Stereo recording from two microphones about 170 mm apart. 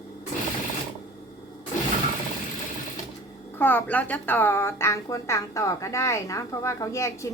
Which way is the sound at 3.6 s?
10° left (ahead or behind).